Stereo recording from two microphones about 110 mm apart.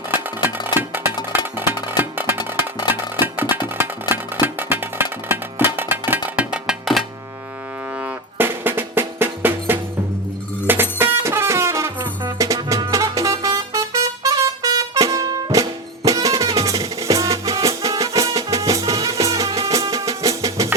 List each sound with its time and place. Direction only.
0.1 s a sound: 20° right (ahead or behind)
2.0 s music: 20° right (ahead or behind)
8.4 s drum: 20° right (ahead or behind)
10.7 s music: 20° right (ahead or behind)
16.0 s drum: 30° right (ahead or behind)
18.9 s music: 50° right (ahead or behind); by 20.7 s 30° right (ahead or behind)